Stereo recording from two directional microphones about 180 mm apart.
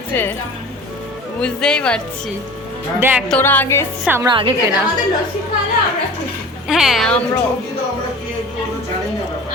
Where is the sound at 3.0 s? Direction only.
10° right (ahead or behind).